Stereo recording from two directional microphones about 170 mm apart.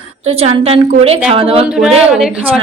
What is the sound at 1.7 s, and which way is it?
Speech, 5° right (ahead or behind).